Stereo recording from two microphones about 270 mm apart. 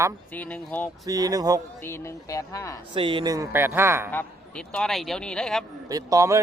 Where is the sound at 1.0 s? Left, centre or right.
Centre.